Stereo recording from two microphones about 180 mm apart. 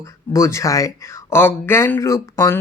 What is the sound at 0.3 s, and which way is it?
Speech, 15° left (ahead or behind).